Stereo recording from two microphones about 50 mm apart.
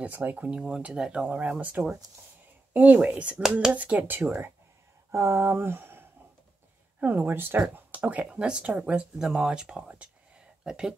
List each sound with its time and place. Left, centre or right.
0.1 s speech: right
0.5 s speech: centre
1.2 s speech: right
5.1 s speech: right
7.0 s speech: right
7.9 s speech: right
8.4 s speech: centre